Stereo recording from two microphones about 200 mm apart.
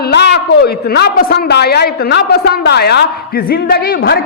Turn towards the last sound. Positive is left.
turn(degrees=55)  # may be behind; listen again after turning